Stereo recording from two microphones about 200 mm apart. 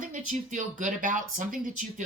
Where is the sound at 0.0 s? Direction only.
40° right (ahead or behind).